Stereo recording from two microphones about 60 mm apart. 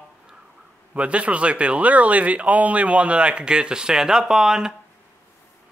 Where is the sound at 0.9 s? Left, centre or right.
Right.